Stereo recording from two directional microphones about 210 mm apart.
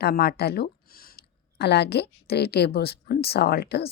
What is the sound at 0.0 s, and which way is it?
A woman's voice, 50° left (ahead or behind).